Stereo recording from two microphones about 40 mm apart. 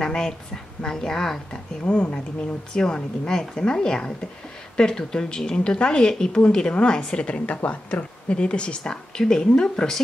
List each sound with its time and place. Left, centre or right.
0.0 s speech: centre
1.5 s speech: left
7.2 s speech: left